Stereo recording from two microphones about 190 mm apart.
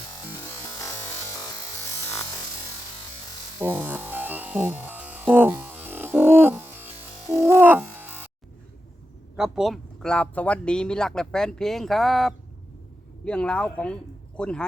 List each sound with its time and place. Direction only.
0.3 s music: 15° left (ahead or behind)
3.6 s music: 10° right (ahead or behind)
9.3 s speech: 5° right (ahead or behind)